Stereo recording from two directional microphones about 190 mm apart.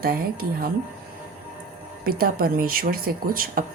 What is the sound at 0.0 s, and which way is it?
Speech, 50° right (ahead or behind).